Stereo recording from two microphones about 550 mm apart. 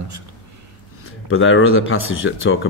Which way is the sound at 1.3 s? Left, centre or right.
Left.